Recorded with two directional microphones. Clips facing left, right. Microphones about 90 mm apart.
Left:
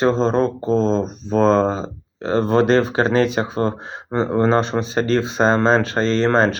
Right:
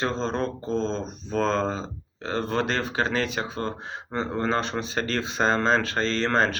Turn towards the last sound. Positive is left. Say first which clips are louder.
# left 7 dB
turn(degrees=20)  # may be behind; listen again after turning